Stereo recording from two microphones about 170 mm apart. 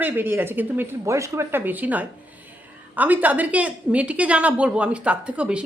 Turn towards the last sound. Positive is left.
turn(degrees=-5)  # may be behind; listen again after turning